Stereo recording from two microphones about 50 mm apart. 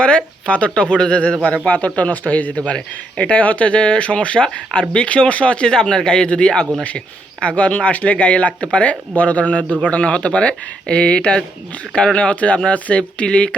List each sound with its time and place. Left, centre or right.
0.0 s speech: left
1.6 s speech: left
9.6 s a man's voice: right
9.9 s speech: left